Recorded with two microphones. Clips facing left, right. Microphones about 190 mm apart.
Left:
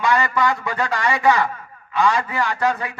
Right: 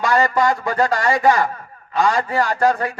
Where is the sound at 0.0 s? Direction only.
40° right (ahead or behind).